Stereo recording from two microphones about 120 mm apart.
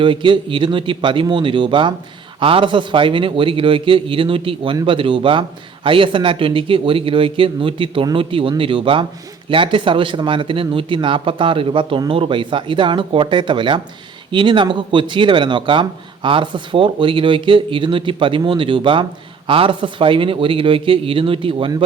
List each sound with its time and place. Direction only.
0.0 s speech: 45° right (ahead or behind)